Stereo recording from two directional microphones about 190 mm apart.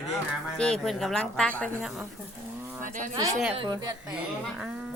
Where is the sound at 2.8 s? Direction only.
45° right (ahead or behind).